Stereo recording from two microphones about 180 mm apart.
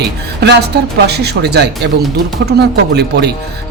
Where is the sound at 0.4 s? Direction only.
65° right (ahead or behind).